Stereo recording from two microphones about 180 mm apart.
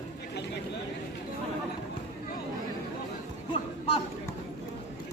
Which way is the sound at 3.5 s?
30° left (ahead or behind).